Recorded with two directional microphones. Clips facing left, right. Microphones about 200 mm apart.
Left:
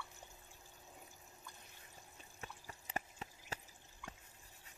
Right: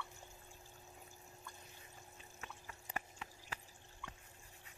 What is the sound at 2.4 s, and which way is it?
Water, 35° left (ahead or behind).